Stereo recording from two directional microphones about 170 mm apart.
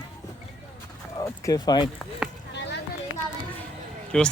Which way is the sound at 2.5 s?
90° left.